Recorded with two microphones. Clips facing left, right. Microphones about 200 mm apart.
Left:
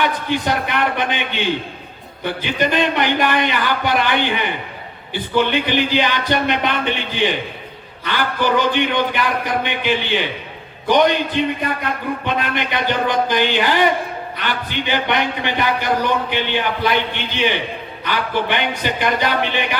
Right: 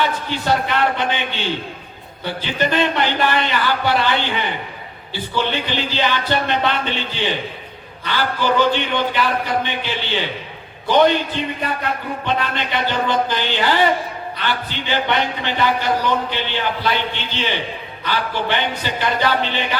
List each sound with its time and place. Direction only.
0.0 s a sound: 15° left (ahead or behind)
2.2 s a man's voice: 15° left (ahead or behind)
12.2 s a man's voice: 15° left (ahead or behind)